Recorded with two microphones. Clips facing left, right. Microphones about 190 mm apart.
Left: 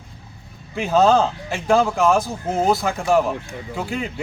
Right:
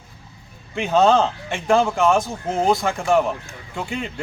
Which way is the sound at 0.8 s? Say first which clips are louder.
Even; centre (ahead or behind).